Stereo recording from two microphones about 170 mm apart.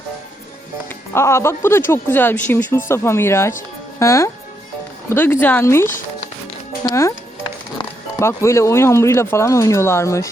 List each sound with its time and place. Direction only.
1.1 s speech: 15° left (ahead or behind)
8.2 s speech: 15° left (ahead or behind)